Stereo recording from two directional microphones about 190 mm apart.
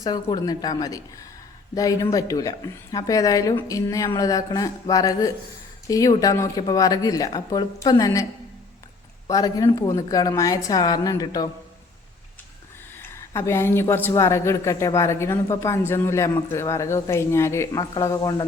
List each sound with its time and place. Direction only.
0.0 s a woman's voice: 20° left (ahead or behind)
9.3 s a woman's voice: 20° left (ahead or behind)
13.0 s a woman's voice: 15° left (ahead or behind)